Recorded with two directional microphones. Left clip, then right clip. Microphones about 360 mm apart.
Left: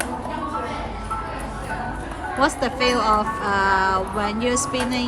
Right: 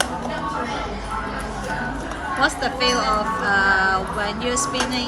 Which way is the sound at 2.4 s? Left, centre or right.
Centre.